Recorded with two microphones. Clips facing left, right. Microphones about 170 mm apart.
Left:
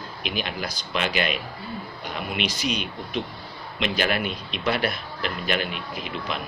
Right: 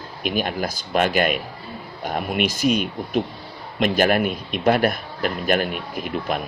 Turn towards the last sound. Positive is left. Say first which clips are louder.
# right 6 dB
turn(degrees=-50)  # may be behind; listen again after turning